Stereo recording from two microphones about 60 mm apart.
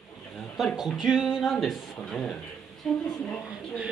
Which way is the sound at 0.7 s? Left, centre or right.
Centre.